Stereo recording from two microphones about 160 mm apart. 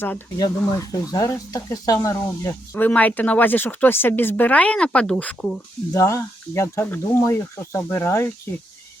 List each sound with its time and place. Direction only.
0.3 s speech: 25° left (ahead or behind)
2.7 s speech: 10° left (ahead or behind)
5.9 s speech: 20° left (ahead or behind)